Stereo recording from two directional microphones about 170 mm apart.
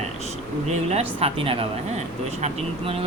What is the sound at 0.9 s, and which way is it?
Speech, 35° right (ahead or behind).